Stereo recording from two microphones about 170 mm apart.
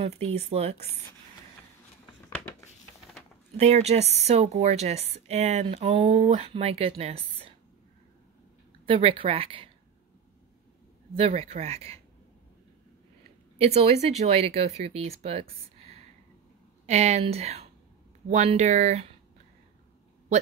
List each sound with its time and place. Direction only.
0.0 s speech: 35° right (ahead or behind)
3.5 s speech: 40° right (ahead or behind)
8.8 s speech: 30° right (ahead or behind)
11.1 s speech: 35° right (ahead or behind)
13.6 s speech: 40° right (ahead or behind)
16.8 s speech: 40° right (ahead or behind)